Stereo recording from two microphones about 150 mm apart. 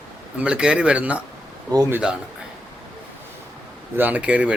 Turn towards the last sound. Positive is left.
turn(degrees=-10)  # may be behind; listen again after turning